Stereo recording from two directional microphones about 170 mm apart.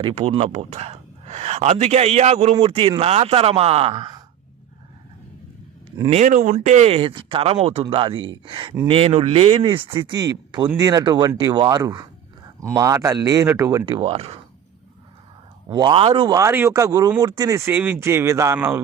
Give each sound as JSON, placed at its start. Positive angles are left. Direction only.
{"t": 0.0, "sound": "a man's voice", "side_deg": -40}
{"t": 6.1, "sound": "a man's voice", "side_deg": -45}
{"t": 15.7, "sound": "speech", "side_deg": -25}